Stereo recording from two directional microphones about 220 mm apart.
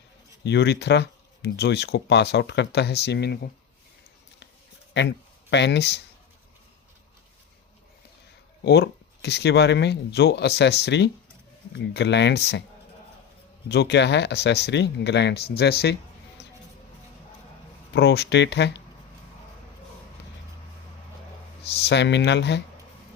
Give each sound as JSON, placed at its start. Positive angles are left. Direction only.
{"t": 0.4, "sound": "speech", "side_deg": 50}
{"t": 4.9, "sound": "speech", "side_deg": 50}
{"t": 8.6, "sound": "speech", "side_deg": 50}
{"t": 13.7, "sound": "speech", "side_deg": 50}
{"t": 17.9, "sound": "speech", "side_deg": 50}
{"t": 21.8, "sound": "speech", "side_deg": 50}